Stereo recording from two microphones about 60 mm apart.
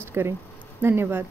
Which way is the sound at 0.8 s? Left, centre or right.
Right.